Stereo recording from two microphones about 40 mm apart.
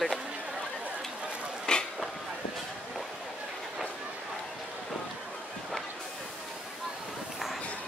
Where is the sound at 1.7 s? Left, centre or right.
Left.